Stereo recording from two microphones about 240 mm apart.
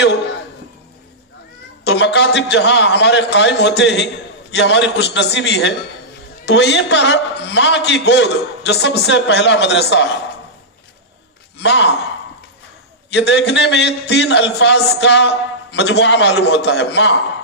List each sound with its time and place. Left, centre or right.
1.8 s a man's voice: left
11.6 s a man's voice: left
13.1 s a man's voice: left